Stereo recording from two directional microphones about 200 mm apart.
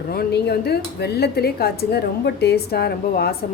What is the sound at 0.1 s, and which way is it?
A woman's voice, 55° left (ahead or behind).